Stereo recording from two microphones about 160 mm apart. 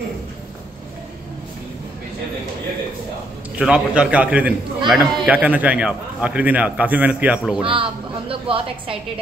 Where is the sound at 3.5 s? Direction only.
5° right (ahead or behind).